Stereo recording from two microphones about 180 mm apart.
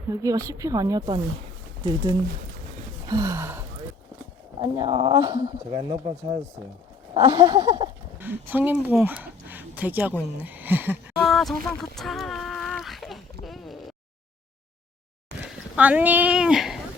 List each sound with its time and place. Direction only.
0.1 s speech: 20° right (ahead or behind)
3.1 s gasp: 20° right (ahead or behind)
4.6 s speech: 20° right (ahead or behind)
8.2 s speech: 10° right (ahead or behind)
11.2 s a sound: centre (ahead or behind)
15.4 s a sound: 5° right (ahead or behind)